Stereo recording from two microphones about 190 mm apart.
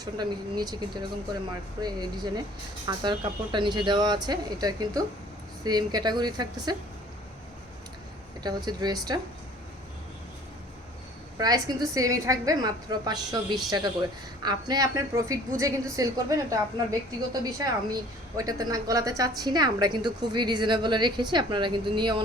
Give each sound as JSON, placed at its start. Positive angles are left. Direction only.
{"t": 0.0, "sound": "speech", "side_deg": -20}
{"t": 8.4, "sound": "speech", "side_deg": -20}
{"t": 11.3, "sound": "a woman's voice", "side_deg": -20}